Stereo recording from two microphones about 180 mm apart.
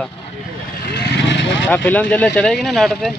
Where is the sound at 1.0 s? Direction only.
70° left (ahead or behind); by 1.6 s 90° left.